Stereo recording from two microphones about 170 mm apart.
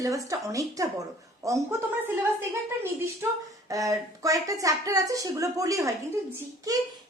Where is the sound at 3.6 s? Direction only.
20° right (ahead or behind).